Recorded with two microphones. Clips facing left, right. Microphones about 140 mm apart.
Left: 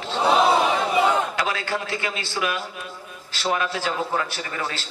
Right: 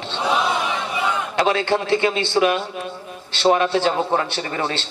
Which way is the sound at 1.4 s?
25° right (ahead or behind).